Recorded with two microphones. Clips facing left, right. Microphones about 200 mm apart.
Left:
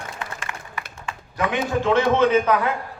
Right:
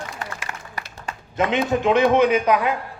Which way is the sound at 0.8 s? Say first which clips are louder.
Right 1 dB; 40° right (ahead or behind).